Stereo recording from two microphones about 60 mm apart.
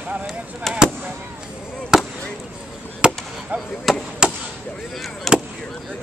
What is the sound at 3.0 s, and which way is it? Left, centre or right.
Chop, centre.